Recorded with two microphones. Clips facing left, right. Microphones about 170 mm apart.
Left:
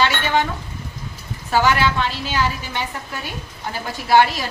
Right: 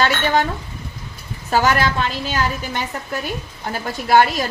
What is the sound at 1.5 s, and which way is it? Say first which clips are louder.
A woman's voice: even; 45° right (ahead or behind).